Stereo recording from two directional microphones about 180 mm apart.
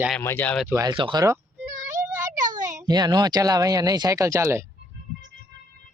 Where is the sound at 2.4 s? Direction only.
45° right (ahead or behind).